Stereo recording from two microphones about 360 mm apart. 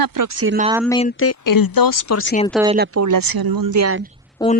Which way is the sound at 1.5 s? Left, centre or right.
Left.